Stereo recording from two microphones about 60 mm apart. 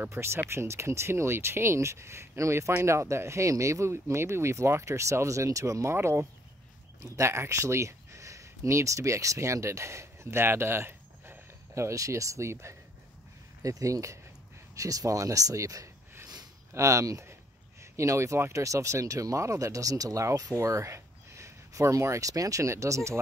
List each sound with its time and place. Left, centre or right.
0.1 s speech: right
5.9 s speech: right
11.7 s speech: right
13.6 s speech: right
17.9 s speech: right
20.2 s speech: right